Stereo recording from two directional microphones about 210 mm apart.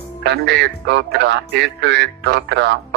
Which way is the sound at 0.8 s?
55° right (ahead or behind).